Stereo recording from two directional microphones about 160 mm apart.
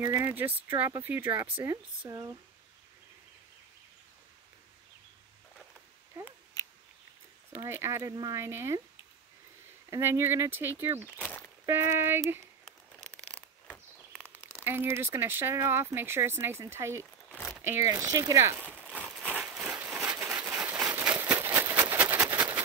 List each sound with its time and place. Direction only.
0.0 s speech: 10° right (ahead or behind)
7.5 s speech: 15° right (ahead or behind)
9.8 s speech: 15° right (ahead or behind)
11.1 s a sound: 10° left (ahead or behind)
11.6 s speech: 15° right (ahead or behind)
14.1 s a sound: 15° right (ahead or behind)
14.6 s speech: 15° right (ahead or behind)
17.3 s crumpling: 10° left (ahead or behind)
17.6 s speech: 15° right (ahead or behind)
18.9 s a sound: centre (ahead or behind)